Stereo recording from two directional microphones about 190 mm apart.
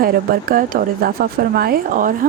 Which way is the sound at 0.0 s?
50° right (ahead or behind).